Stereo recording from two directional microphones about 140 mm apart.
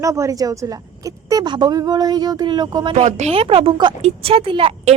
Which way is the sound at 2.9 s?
55° right (ahead or behind).